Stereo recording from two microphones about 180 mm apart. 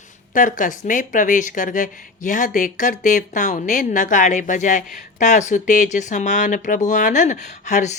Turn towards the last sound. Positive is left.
turn(degrees=40)  # may be behind; listen again after turning